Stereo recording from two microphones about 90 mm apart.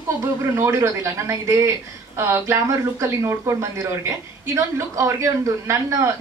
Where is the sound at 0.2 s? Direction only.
35° right (ahead or behind).